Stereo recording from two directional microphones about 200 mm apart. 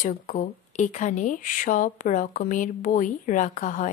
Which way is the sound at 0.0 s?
40° left (ahead or behind).